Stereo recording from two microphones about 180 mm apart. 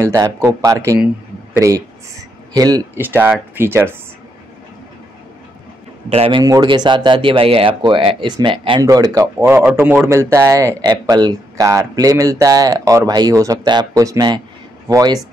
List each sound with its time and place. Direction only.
0.0 s speech: 15° right (ahead or behind)
3.0 s speech: 10° right (ahead or behind)
6.0 s a man's voice: 35° right (ahead or behind)
6.4 s speech: 20° right (ahead or behind)